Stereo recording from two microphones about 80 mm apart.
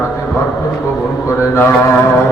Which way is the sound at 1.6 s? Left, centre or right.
Left.